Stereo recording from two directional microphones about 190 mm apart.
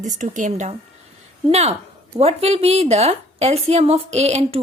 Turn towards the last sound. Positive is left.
turn(degrees=-35)  # may be behind; listen again after turning